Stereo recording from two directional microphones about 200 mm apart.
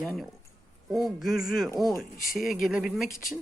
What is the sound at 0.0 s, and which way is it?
A woman's voice, centre (ahead or behind).